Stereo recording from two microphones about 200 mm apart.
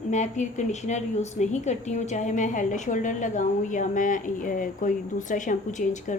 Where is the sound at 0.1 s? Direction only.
35° left (ahead or behind).